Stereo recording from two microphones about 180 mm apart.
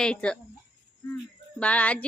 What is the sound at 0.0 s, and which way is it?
Speech, 5° left (ahead or behind).